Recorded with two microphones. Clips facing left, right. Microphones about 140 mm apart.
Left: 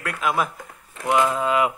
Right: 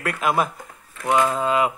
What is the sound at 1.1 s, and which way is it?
Speech, 20° right (ahead or behind).